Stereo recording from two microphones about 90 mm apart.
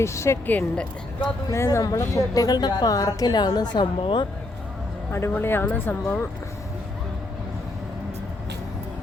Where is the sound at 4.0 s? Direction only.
65° left (ahead or behind).